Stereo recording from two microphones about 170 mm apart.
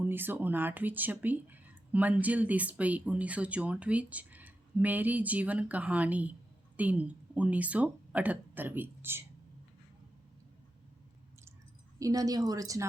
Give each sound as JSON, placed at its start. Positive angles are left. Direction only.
{"t": 0.0, "sound": "speech", "side_deg": -10}
{"t": 11.9, "sound": "speech", "side_deg": -20}